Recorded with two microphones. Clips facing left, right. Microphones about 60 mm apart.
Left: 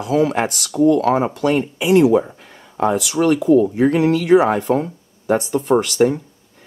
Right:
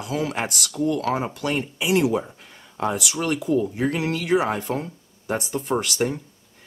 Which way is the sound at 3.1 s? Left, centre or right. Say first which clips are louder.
Left 12 dB; left.